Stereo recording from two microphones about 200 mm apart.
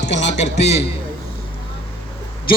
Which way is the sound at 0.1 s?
35° left (ahead or behind).